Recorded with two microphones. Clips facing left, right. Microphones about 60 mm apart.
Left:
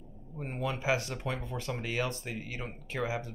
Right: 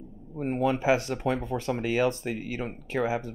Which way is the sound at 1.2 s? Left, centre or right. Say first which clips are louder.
Right 8 dB; centre.